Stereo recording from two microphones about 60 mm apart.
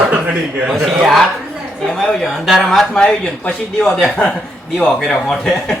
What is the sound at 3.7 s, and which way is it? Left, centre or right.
Speech, centre.